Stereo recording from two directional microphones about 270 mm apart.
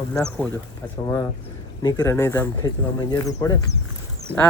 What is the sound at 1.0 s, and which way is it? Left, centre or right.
Speech, centre.